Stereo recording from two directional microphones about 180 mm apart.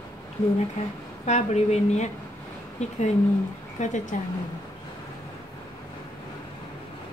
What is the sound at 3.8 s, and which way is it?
Speech, 40° left (ahead or behind).